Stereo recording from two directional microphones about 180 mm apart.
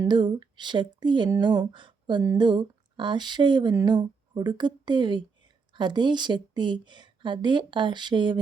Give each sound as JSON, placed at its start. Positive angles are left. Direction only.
{"t": 0.0, "sound": "speech", "side_deg": -25}